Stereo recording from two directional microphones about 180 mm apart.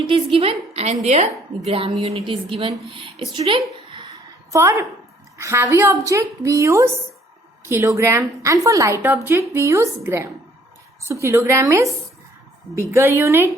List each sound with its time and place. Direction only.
0.3 s a woman's voice: 35° right (ahead or behind)
4.5 s a woman's voice: 15° right (ahead or behind)